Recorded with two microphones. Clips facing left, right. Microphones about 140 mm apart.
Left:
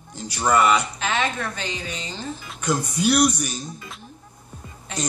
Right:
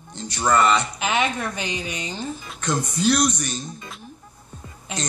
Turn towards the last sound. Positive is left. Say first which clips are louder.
# left 1 dB
turn(degrees=-15)  # may be behind; listen again after turning